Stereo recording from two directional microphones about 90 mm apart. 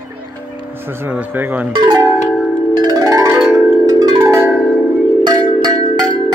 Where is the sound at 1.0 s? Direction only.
20° right (ahead or behind).